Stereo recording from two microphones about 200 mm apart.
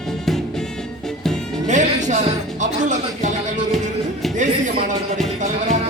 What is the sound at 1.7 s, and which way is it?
Music, 35° right (ahead or behind).